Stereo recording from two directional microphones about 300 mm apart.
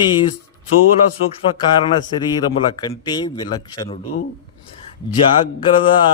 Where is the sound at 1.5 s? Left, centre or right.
Centre.